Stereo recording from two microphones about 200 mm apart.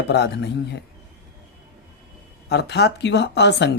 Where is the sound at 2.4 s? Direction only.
55° left (ahead or behind).